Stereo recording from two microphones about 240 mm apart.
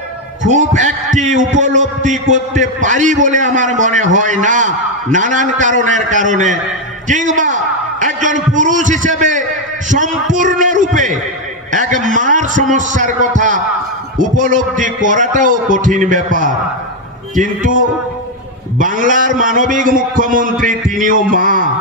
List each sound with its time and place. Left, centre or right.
0.5 s a man's voice: right
18.8 s a man's voice: right